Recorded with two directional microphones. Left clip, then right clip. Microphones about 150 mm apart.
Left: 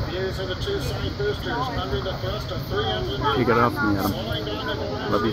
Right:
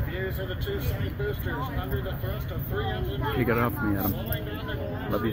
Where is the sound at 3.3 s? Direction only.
30° right (ahead or behind).